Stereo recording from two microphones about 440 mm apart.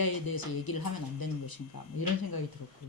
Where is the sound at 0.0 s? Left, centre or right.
Left.